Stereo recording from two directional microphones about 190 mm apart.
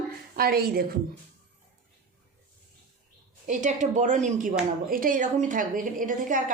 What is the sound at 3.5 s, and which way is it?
A woman's voice, 40° right (ahead or behind).